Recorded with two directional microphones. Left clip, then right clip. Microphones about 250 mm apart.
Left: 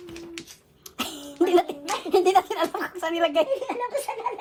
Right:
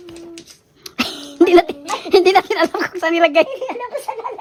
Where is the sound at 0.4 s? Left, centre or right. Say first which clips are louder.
Right 8 dB; right.